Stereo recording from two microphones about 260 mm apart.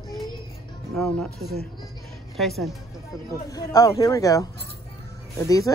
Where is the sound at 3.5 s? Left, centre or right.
Centre.